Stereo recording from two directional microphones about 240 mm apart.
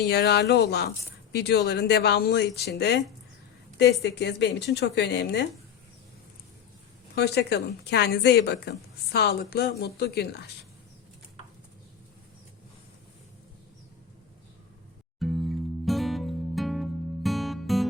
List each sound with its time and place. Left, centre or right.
0.0 s a woman's voice: left
7.2 s a woman's voice: left
15.2 s music: centre